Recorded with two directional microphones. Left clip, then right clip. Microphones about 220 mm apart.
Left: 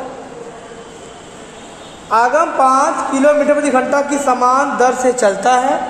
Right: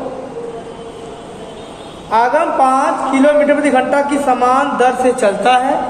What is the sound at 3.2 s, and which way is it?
Speech, 30° left (ahead or behind).